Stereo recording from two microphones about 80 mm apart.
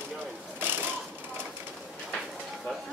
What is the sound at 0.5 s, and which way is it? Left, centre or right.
Mechanisms, right.